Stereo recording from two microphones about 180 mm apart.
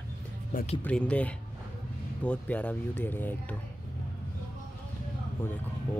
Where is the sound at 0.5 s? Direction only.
45° left (ahead or behind).